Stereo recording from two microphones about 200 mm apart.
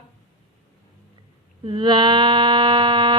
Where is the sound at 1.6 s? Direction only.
25° right (ahead or behind).